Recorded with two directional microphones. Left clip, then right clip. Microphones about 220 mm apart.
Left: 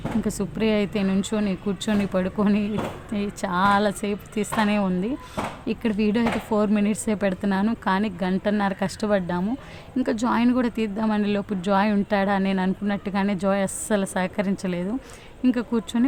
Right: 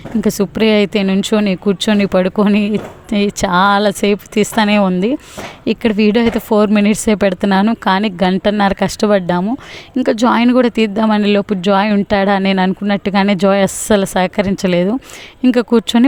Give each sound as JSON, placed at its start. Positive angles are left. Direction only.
{"t": 0.2, "sound": "speech", "side_deg": -35}